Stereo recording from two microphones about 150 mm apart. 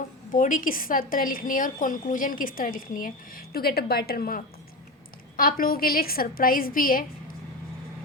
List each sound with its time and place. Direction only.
0.3 s a woman's voice: 60° left (ahead or behind)